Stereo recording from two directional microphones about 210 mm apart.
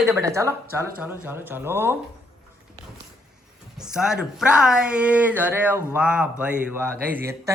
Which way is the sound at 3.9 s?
5° right (ahead or behind).